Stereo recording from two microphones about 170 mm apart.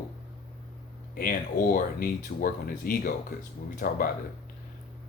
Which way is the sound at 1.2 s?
55° left (ahead or behind).